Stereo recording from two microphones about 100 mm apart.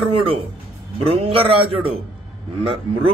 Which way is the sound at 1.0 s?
70° right (ahead or behind).